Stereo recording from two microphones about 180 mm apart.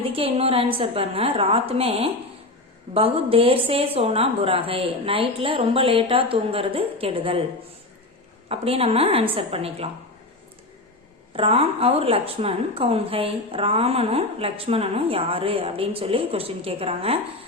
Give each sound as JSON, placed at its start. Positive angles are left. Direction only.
{"t": 0.0, "sound": "a woman's voice", "side_deg": -30}
{"t": 8.4, "sound": "a woman's voice", "side_deg": -35}
{"t": 11.3, "sound": "a woman's voice", "side_deg": -35}